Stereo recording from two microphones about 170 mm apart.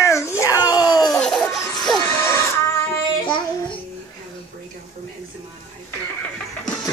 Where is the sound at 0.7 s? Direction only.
25° left (ahead or behind).